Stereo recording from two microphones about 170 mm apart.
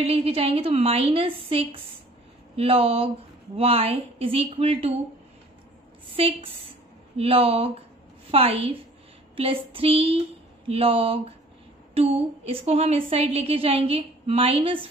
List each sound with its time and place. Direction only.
0.0 s a woman's voice: 35° right (ahead or behind)
6.1 s a woman's voice: 35° right (ahead or behind)